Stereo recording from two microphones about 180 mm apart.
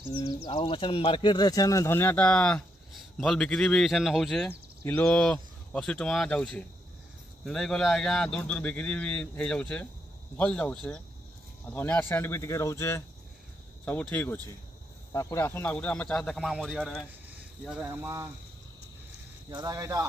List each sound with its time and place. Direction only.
0.0 s speech: 25° left (ahead or behind); by 4.5 s centre (ahead or behind)
4.5 s speech: 10° left (ahead or behind); by 18.1 s 5° right (ahead or behind)
19.5 s speech: 20° right (ahead or behind)